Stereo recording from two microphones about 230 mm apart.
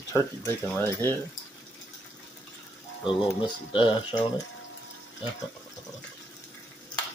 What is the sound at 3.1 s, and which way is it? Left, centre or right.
Speech, left.